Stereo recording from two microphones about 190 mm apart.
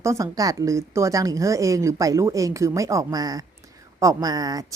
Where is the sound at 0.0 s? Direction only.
15° right (ahead or behind).